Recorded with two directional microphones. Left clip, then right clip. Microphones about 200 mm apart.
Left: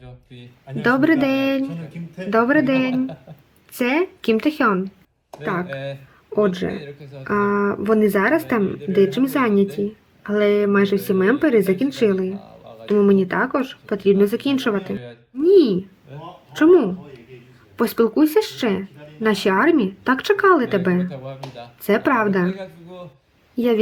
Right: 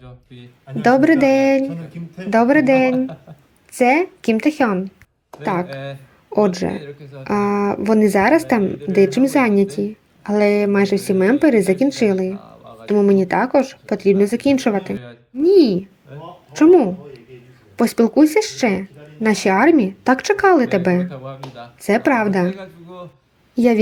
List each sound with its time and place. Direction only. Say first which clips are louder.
0.3 s speech: right 2 dB; 5° right (ahead or behind)
6.3 s speech: right 2 dB; 15° right (ahead or behind)
6.7 s speech: right 3 dB; centre (ahead or behind)
7.3 s speech: right 1 dB; 15° right (ahead or behind)
12.3 s a sound: right 2 dB; centre (ahead or behind)
13.1 s speech: right 2 dB; 15° right (ahead or behind)
14.9 s speech: right 3 dB; centre (ahead or behind)
16.5 s speech: right 2 dB; 5° right (ahead or behind)
21.0 s speech: right 2 dB; centre (ahead or behind)
23.6 s speech: right 3 dB; 15° right (ahead or behind)